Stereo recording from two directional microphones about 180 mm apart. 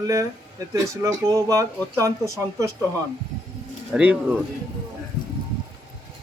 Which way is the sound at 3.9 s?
5° right (ahead or behind).